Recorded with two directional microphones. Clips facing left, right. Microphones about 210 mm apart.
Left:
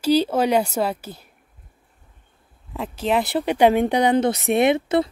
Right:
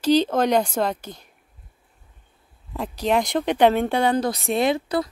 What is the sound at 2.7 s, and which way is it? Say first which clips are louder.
Speech: even; centre (ahead or behind).